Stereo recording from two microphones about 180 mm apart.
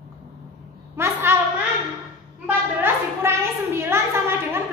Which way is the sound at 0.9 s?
15° right (ahead or behind).